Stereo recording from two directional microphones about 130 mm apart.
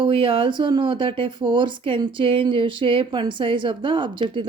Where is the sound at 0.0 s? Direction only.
40° right (ahead or behind).